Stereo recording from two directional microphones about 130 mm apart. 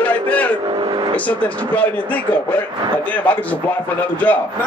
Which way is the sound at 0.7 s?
40° right (ahead or behind).